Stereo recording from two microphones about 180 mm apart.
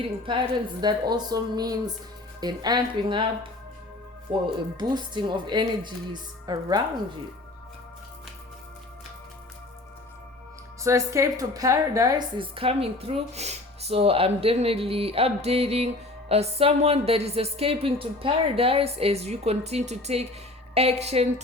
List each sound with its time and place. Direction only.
0.8 s a woman's voice: 25° right (ahead or behind)
4.3 s a woman's voice: 30° right (ahead or behind)
10.8 s a woman's voice: 15° right (ahead or behind); by 21.4 s 35° right (ahead or behind)